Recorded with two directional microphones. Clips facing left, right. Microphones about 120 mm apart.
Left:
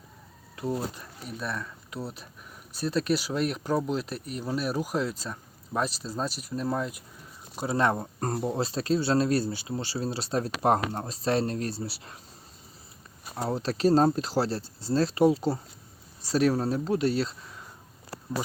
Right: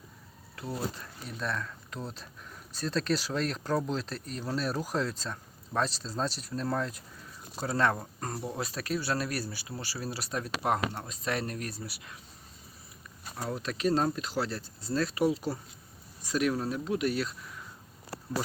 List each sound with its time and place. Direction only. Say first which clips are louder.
0.5 s speech: left 5 dB; 20° left (ahead or behind)
1.4 s speech: even; 10° left (ahead or behind); by 12.2 s 35° left (ahead or behind)
13.4 s speech: left 6 dB; 35° left (ahead or behind)